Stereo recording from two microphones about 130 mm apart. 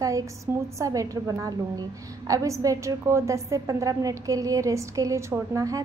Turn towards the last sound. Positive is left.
turn(degrees=-25)  # may be behind; listen again after turning